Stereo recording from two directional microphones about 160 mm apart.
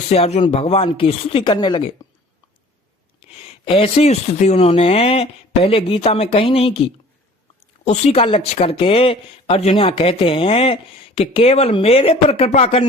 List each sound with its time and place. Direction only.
0.1 s speech: 40° left (ahead or behind)
3.3 s speech: 35° left (ahead or behind)